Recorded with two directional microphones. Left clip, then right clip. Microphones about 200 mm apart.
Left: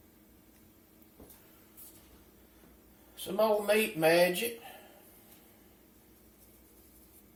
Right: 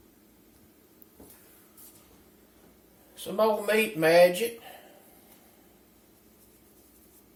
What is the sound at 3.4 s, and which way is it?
Speech, 35° right (ahead or behind).